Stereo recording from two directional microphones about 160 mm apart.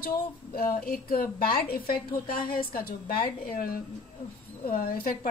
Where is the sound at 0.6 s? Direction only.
65° left (ahead or behind).